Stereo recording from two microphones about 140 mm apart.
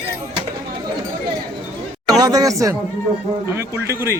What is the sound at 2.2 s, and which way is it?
Speech, 30° right (ahead or behind).